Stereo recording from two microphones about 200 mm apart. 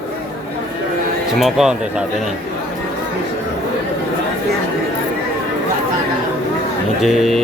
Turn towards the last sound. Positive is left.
turn(degrees=0)  # may be behind; listen again after turning